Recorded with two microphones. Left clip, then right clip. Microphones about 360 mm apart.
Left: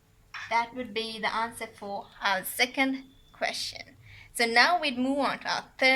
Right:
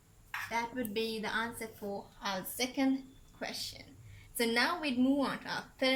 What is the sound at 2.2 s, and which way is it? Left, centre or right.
A woman's voice, centre.